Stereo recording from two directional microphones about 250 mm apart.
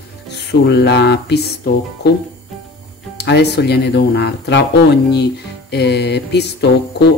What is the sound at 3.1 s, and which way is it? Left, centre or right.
Speech, left.